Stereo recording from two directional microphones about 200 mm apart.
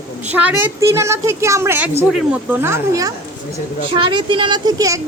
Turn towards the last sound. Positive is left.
turn(degrees=-15)  # may be behind; listen again after turning